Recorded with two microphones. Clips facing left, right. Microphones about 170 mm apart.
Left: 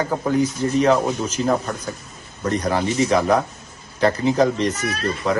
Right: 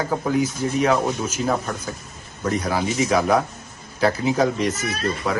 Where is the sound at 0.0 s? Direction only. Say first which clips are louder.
Left 2 dB; 5° right (ahead or behind).